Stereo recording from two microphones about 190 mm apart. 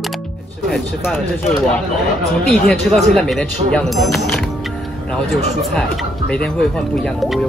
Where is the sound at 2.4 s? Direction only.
Centre (ahead or behind).